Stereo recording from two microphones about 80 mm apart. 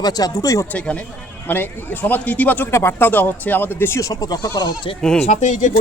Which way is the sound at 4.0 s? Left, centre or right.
Left.